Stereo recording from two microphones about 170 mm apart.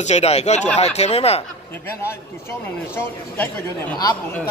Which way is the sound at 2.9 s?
10° left (ahead or behind).